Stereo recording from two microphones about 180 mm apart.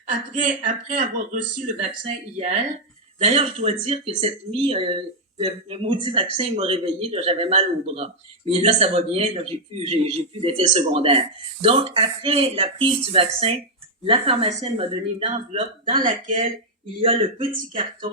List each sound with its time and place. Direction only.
0.1 s speech: 45° right (ahead or behind)
15.9 s speech: 45° right (ahead or behind)
17.0 s speech: 30° right (ahead or behind)